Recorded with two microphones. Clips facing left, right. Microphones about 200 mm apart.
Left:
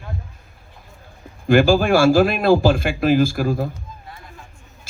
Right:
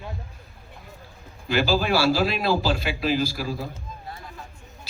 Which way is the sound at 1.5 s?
50° left (ahead or behind).